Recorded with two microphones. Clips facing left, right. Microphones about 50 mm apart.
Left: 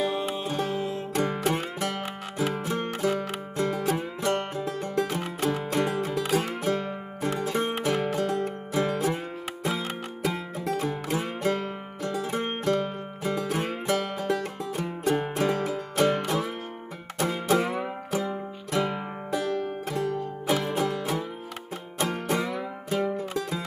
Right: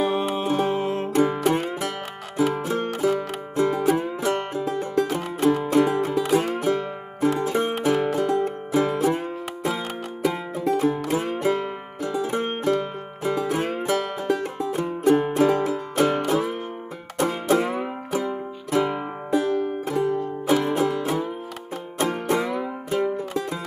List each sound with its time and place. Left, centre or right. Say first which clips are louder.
0.0 s music: right 5 dB; right
1.1 s music: right 6 dB; centre
10.2 s music: right 6 dB; centre
21.0 s music: right 4 dB; centre
21.9 s music: right 4 dB; centre